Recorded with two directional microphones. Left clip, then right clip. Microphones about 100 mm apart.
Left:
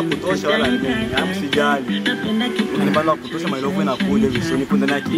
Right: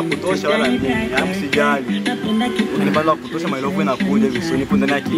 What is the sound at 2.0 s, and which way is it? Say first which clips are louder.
Music: even; 15° left (ahead or behind).